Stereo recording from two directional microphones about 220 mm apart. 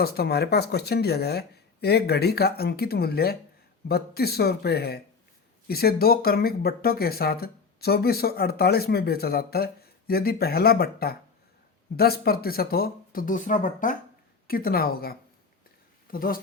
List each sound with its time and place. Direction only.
0.0 s speech: 45° left (ahead or behind)
16.1 s speech: 40° left (ahead or behind)